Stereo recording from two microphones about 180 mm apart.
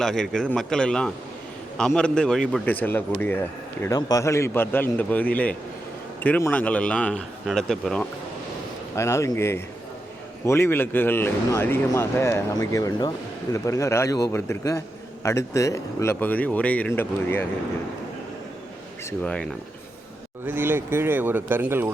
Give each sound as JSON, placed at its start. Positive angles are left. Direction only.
{"t": 0.0, "sound": "a man's voice", "side_deg": 0}
{"t": 9.0, "sound": "a man's voice", "side_deg": 15}
{"t": 19.2, "sound": "a man's voice", "side_deg": 5}
{"t": 20.5, "sound": "speech", "side_deg": -10}